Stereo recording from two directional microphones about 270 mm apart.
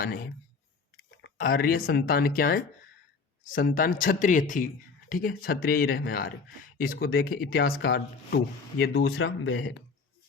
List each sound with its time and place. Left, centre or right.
0.0 s speech: left
9.0 s speech: left